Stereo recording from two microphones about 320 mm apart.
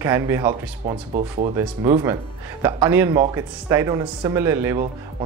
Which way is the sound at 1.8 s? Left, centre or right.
Centre.